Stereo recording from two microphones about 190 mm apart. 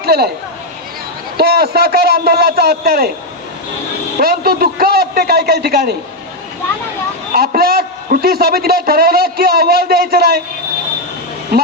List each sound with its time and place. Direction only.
0.0 s speech: 55° right (ahead or behind)
1.4 s a man's voice: 55° right (ahead or behind)
4.2 s a man's voice: 50° right (ahead or behind)
7.3 s a man's voice: 55° right (ahead or behind)